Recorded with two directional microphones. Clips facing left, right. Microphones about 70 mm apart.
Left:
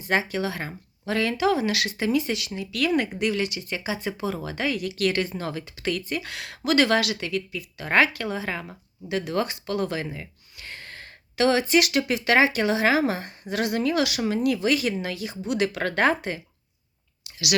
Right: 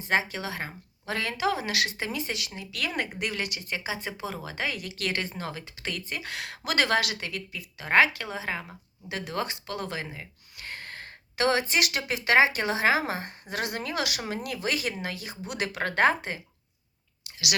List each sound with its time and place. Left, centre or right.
0.0 s speech: right
3.8 s speech: right
7.8 s speech: centre
9.0 s speech: right
10.6 s speech: right